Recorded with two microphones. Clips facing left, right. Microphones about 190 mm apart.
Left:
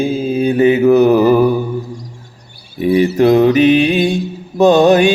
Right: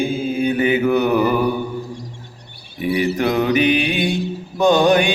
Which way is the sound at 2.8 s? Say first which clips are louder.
Left 7 dB; 30° left (ahead or behind).